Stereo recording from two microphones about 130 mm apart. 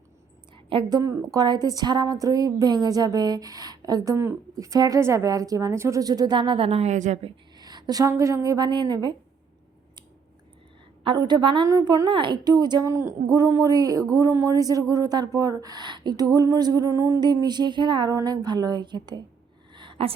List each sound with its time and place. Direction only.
0.5 s a woman's voice: 40° right (ahead or behind); by 7.2 s 65° right (ahead or behind)
7.5 s a woman's voice: 30° right (ahead or behind)
11.0 s a woman's voice: 35° right (ahead or behind)
11.7 s a woman's voice: 25° right (ahead or behind)
12.0 s a woman's voice: 35° right (ahead or behind); by 17.2 s 20° right (ahead or behind)
17.2 s a woman's voice: 35° right (ahead or behind)
19.7 s a sound: 40° right (ahead or behind)